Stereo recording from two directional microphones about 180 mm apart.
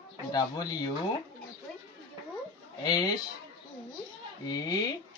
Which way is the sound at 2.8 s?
20° left (ahead or behind).